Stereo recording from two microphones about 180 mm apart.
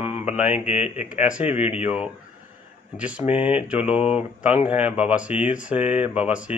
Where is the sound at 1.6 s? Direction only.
5° right (ahead or behind).